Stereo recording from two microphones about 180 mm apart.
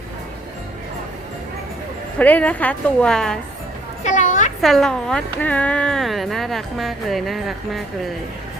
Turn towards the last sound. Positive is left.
turn(degrees=0)  # may be behind; listen again after turning